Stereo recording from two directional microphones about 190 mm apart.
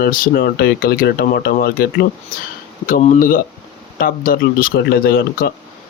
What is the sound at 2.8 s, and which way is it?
Speech, 40° left (ahead or behind).